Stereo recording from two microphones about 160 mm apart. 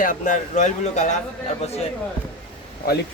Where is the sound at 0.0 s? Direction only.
55° left (ahead or behind).